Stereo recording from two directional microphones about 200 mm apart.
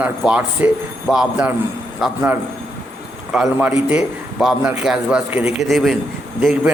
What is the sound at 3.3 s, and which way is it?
A man's voice, 5° right (ahead or behind).